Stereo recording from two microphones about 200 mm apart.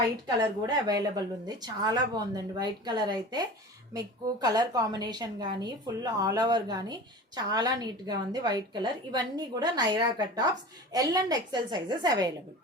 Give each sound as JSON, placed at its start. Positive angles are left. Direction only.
{"t": 0.3, "sound": "a woman's voice", "side_deg": -20}